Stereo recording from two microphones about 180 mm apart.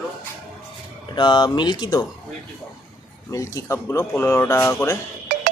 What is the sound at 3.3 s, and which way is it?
A man's voice, 15° left (ahead or behind).